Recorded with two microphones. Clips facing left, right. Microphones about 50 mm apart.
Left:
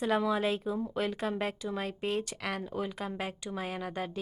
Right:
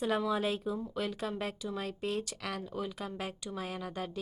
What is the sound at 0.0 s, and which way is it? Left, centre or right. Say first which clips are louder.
Speech: left 2 dB; centre.